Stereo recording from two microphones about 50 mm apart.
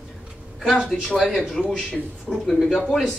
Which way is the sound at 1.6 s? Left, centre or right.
Centre.